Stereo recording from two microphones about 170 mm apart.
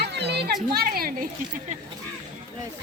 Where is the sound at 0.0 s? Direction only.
80° right; by 1.3 s 60° right (ahead or behind).